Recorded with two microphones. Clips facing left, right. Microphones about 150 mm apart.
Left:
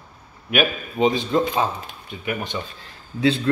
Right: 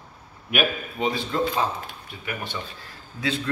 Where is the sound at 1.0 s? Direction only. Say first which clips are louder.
Left 6 dB; 20° left (ahead or behind).